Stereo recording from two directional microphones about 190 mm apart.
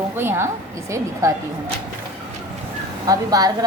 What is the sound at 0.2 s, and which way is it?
A woman's voice, 15° right (ahead or behind).